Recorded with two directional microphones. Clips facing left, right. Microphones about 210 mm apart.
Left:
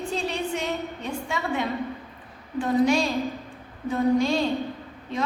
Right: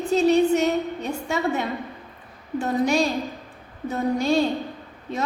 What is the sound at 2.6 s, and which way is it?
A woman's voice, 40° right (ahead or behind).